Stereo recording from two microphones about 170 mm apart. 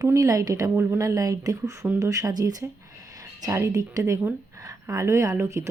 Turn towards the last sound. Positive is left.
turn(degrees=-15)  # may be behind; listen again after turning